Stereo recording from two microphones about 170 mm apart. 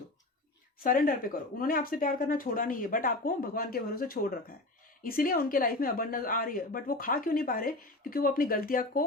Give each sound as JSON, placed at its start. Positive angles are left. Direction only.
{"t": 0.8, "sound": "speech", "side_deg": 55}